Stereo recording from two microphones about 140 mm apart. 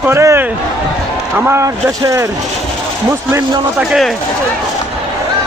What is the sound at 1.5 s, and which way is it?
Speech, 20° right (ahead or behind).